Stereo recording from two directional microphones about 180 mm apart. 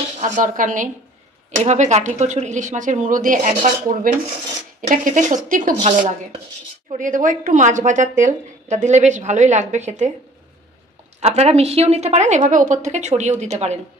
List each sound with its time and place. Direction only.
0.2 s speech: 45° right (ahead or behind)
11.1 s speech: 35° right (ahead or behind)